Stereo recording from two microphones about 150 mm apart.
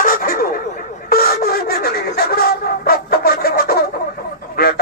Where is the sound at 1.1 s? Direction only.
90° left.